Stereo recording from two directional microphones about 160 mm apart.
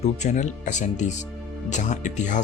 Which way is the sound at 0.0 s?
45° left (ahead or behind).